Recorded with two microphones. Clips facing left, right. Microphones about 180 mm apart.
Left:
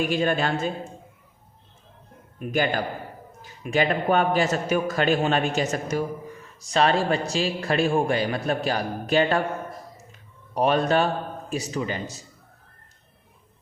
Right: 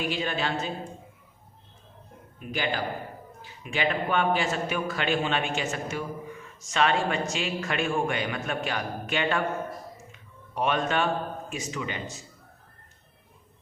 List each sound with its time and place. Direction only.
0.0 s a woman's voice: 45° left (ahead or behind)
2.4 s a woman's voice: 45° left (ahead or behind)